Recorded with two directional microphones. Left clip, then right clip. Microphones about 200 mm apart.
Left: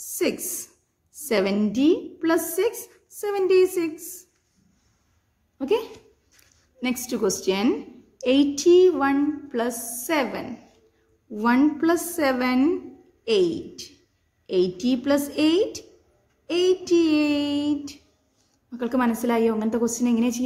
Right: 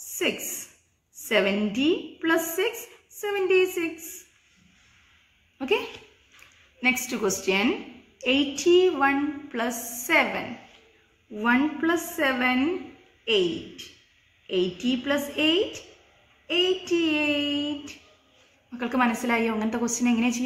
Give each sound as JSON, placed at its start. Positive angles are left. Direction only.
{"t": 1.3, "sound": "a woman's voice", "side_deg": 55}
{"t": 5.6, "sound": "a woman's voice", "side_deg": 35}
{"t": 11.3, "sound": "a sound", "side_deg": 60}
{"t": 14.4, "sound": "a woman's voice", "side_deg": 55}
{"t": 16.4, "sound": "a sound", "side_deg": 55}
{"t": 18.7, "sound": "a woman's voice", "side_deg": 35}